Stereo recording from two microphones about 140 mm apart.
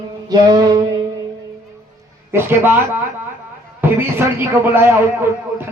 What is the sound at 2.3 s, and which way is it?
Speech, 15° right (ahead or behind).